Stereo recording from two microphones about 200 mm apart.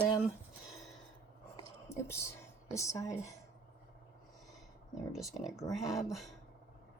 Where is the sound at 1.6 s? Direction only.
15° left (ahead or behind).